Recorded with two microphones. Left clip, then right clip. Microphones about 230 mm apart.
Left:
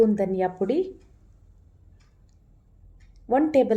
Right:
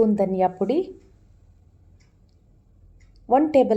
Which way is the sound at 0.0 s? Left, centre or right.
Centre.